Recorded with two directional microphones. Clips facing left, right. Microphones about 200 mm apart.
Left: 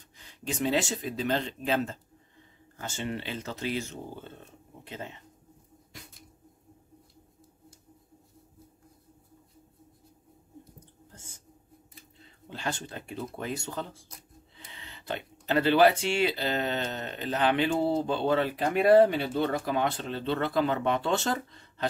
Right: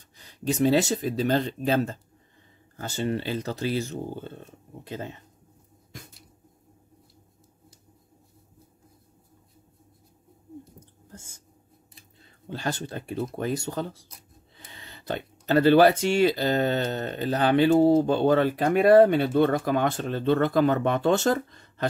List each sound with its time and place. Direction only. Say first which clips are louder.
0.2 s speech: right 8 dB; 40° right (ahead or behind)
12.4 s speech: right 4 dB; 40° right (ahead or behind)